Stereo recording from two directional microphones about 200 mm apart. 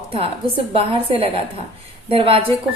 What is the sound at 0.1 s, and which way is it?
A woman's voice, 25° right (ahead or behind).